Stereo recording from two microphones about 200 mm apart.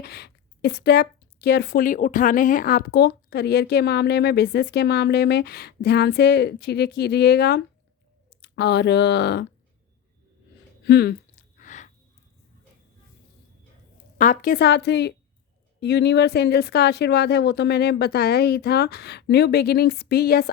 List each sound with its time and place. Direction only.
0.0 s speech: 55° left (ahead or behind)
10.8 s speech: 55° left (ahead or behind)
11.3 s a sound: 40° left (ahead or behind)
14.2 s speech: 45° left (ahead or behind)